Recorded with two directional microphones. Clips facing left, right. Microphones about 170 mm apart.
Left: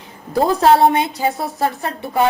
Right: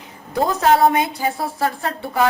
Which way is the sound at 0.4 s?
30° left (ahead or behind).